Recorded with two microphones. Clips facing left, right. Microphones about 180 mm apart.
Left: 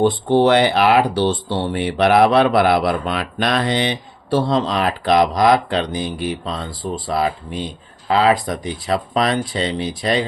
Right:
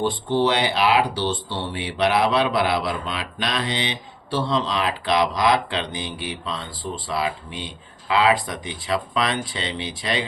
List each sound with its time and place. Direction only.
0.0 s speech: 55° left (ahead or behind)